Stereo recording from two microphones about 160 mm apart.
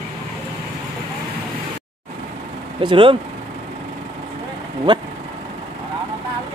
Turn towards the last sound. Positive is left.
turn(degrees=-30)  # may be behind; listen again after turning